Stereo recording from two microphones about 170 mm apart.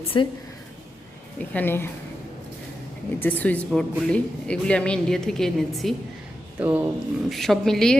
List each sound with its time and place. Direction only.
0.1 s speech: 25° left (ahead or behind)
1.4 s a woman's voice: 10° left (ahead or behind)
3.2 s a woman's voice: 10° left (ahead or behind)
6.6 s speech: 10° right (ahead or behind)
7.3 s speech: centre (ahead or behind)